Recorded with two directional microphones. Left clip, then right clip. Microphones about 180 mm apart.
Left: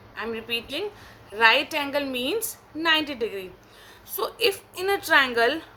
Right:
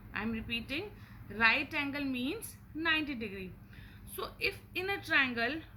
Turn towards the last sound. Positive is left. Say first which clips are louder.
# left 11 dB
turn(degrees=50)  # may be behind; listen again after turning